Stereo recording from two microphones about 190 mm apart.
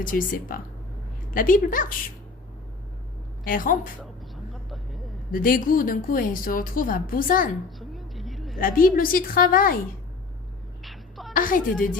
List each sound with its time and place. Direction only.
0.0 s a woman's voice: 45° left (ahead or behind)
3.4 s a woman's voice: 45° left (ahead or behind)
5.3 s a woman's voice: 50° left (ahead or behind)
7.8 s a sound: centre (ahead or behind)
8.5 s a woman's voice: 50° left (ahead or behind)
10.8 s a sound: centre (ahead or behind)
11.3 s a woman's voice: 45° left (ahead or behind)